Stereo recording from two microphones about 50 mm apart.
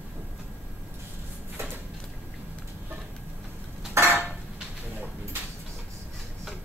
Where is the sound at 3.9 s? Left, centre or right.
Right.